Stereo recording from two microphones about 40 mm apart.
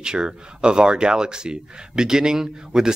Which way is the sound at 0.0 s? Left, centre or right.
Right.